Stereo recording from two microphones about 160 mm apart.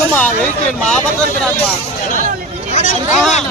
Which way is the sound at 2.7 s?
50° left (ahead or behind).